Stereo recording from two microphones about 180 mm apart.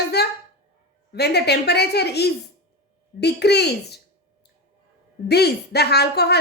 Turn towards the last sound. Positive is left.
turn(degrees=65)  # may be behind; listen again after turning